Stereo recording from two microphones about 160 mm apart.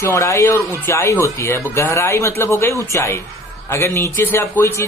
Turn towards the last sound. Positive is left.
turn(degrees=15)  # may be behind; listen again after turning